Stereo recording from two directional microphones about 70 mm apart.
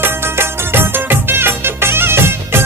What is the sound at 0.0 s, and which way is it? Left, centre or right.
Music, right.